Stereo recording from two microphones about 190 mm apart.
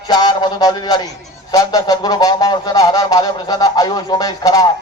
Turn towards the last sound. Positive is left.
turn(degrees=20)  # may be behind; listen again after turning